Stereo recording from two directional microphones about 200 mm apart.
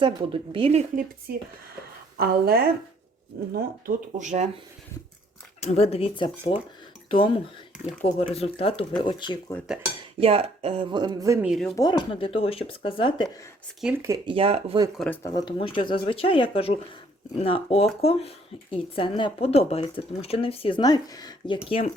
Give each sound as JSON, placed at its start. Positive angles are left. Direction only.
{"t": 0.0, "sound": "speech", "side_deg": -25}
{"t": 2.1, "sound": "a woman's voice", "side_deg": -50}
{"t": 5.6, "sound": "a woman's voice", "side_deg": 30}
{"t": 10.2, "sound": "speech", "side_deg": -30}
{"t": 11.4, "sound": "speech", "side_deg": 0}
{"t": 11.8, "sound": "a woman's voice", "side_deg": 20}
{"t": 13.8, "sound": "speech", "side_deg": -15}
{"t": 14.3, "sound": "speech", "side_deg": -30}
{"t": 14.9, "sound": "a woman's voice", "side_deg": 5}